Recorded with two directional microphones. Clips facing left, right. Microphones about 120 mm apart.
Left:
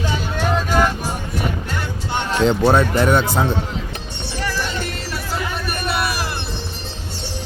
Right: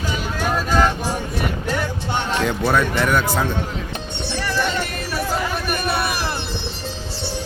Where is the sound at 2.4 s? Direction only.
25° left (ahead or behind).